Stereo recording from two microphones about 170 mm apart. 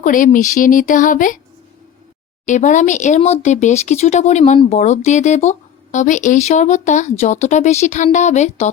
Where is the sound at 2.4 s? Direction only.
45° left (ahead or behind).